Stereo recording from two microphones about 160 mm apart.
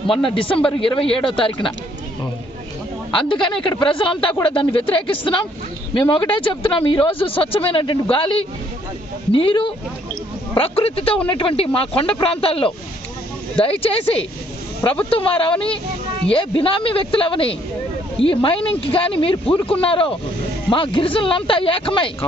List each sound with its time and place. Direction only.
0.2 s speech: 35° left (ahead or behind)
3.1 s speech: 30° left (ahead or behind)
15.0 s speech: 35° left (ahead or behind)
15.5 s speech: 5° left (ahead or behind)
16.3 s speech: 35° left (ahead or behind)